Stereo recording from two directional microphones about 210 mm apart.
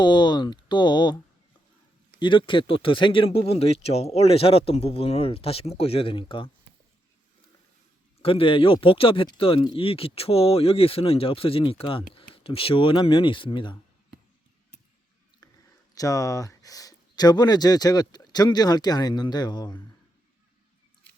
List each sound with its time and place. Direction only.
0.0 s speech: 20° left (ahead or behind)
8.2 s speech: 25° left (ahead or behind)
16.0 s speech: 15° left (ahead or behind)